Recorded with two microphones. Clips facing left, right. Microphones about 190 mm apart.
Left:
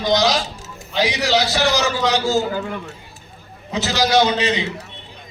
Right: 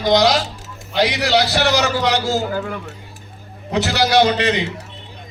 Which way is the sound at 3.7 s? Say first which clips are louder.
Right 1 dB; 65° right (ahead or behind).